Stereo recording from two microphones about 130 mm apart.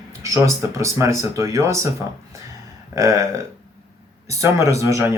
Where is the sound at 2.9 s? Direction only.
25° right (ahead or behind).